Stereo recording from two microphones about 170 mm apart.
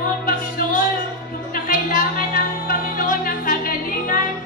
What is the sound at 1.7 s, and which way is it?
Music, 55° left (ahead or behind).